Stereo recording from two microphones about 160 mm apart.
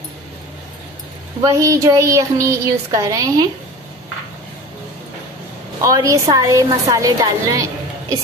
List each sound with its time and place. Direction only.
1.4 s speech: 20° right (ahead or behind)
5.8 s a woman's voice: 20° right (ahead or behind)